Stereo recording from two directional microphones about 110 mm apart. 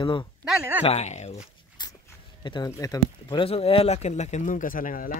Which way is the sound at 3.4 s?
60° left (ahead or behind).